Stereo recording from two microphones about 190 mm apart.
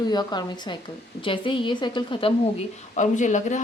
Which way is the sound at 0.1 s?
20° left (ahead or behind).